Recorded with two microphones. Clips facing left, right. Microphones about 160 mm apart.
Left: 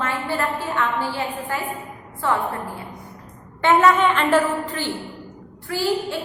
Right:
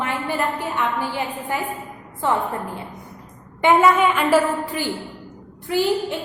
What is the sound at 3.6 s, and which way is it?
A woman's voice, 10° right (ahead or behind).